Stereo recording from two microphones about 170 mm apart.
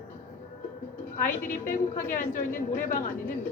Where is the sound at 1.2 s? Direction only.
50° left (ahead or behind).